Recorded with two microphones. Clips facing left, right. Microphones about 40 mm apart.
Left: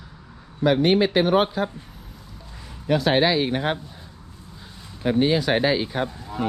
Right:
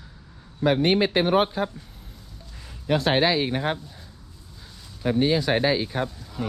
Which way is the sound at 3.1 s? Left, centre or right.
Left.